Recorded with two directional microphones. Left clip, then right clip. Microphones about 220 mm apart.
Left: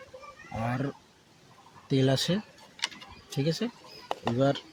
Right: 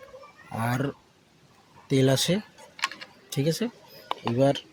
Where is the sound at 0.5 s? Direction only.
25° right (ahead or behind).